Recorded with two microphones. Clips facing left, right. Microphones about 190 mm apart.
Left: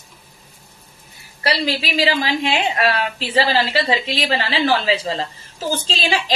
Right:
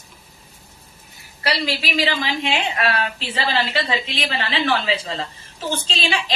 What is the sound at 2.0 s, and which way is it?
A woman's voice, 35° left (ahead or behind).